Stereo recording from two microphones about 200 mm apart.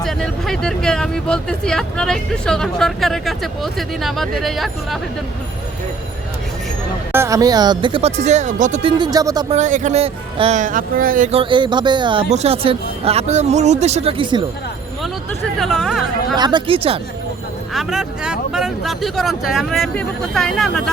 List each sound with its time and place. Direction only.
0.0 s speech: centre (ahead or behind)
7.1 s speech: 15° right (ahead or behind); by 8.8 s 40° right (ahead or behind)
8.8 s speech: 20° right (ahead or behind)
9.5 s speech: 35° right (ahead or behind)
15.5 s chatter: centre (ahead or behind)
16.3 s speech: 20° right (ahead or behind)
17.7 s speech: 5° right (ahead or behind)